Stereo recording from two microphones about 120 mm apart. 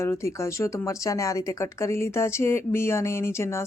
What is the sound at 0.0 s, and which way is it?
Speech, 25° left (ahead or behind).